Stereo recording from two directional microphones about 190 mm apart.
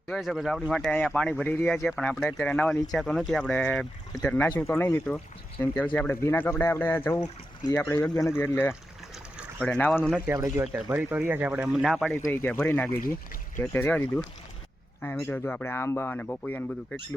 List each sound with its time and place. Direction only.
0.1 s speech: centre (ahead or behind)
10.2 s speech: 20° right (ahead or behind)
10.6 s speech: 5° right (ahead or behind)
12.1 s speech: 15° left (ahead or behind)